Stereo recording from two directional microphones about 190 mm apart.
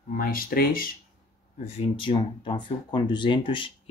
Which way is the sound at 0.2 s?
50° left (ahead or behind).